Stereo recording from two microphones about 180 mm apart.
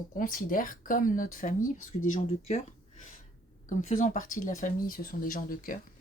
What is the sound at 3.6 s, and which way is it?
Speech, 45° left (ahead or behind).